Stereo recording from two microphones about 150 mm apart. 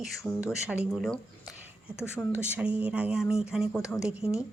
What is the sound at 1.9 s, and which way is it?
Speech, 15° left (ahead or behind).